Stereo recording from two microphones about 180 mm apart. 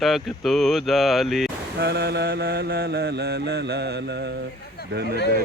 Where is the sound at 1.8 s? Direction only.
65° right (ahead or behind).